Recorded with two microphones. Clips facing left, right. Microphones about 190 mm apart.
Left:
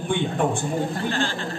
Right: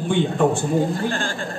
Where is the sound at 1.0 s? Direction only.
45° right (ahead or behind).